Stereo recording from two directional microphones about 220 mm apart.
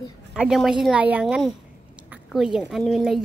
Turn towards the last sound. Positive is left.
turn(degrees=0)  # may be behind; listen again after turning